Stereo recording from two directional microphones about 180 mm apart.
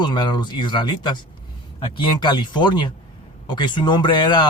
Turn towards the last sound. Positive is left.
turn(degrees=25)  # may be behind; listen again after turning